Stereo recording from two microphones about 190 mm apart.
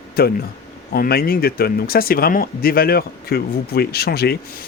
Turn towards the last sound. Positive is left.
turn(degrees=55)  # may be behind; listen again after turning